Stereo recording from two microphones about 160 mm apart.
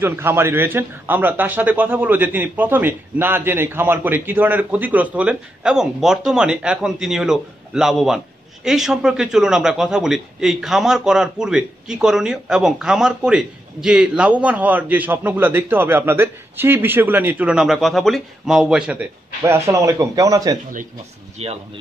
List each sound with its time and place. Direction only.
0.0 s a man's voice: 15° right (ahead or behind)
21.4 s speech: 40° right (ahead or behind)